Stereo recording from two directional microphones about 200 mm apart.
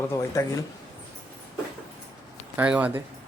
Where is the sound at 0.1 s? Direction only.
15° left (ahead or behind).